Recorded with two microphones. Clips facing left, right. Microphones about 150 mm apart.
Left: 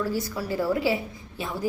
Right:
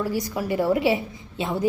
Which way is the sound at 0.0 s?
15° right (ahead or behind).